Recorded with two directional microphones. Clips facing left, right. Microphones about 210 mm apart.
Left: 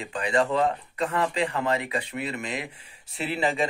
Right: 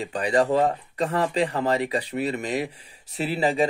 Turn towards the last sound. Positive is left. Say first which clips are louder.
# right 3 dB
turn(degrees=-40)  # may be behind; listen again after turning